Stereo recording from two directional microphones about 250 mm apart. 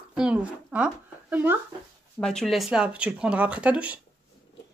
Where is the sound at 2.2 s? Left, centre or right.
Centre.